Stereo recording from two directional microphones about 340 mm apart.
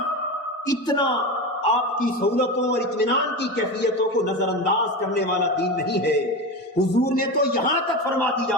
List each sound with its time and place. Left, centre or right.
6.7 s a man's voice: left